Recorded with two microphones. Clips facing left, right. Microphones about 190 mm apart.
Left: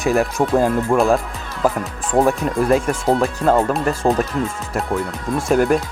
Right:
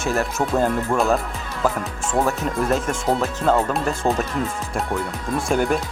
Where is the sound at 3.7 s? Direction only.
Centre (ahead or behind).